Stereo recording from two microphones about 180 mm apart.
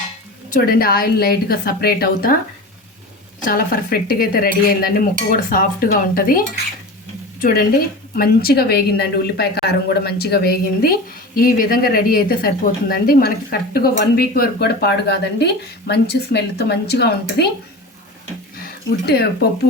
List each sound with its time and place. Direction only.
0.5 s a woman's voice: 55° left (ahead or behind)
3.4 s dishes: 50° left (ahead or behind)
7.3 s a woman's voice: 50° left (ahead or behind)
18.5 s speech: 60° left (ahead or behind)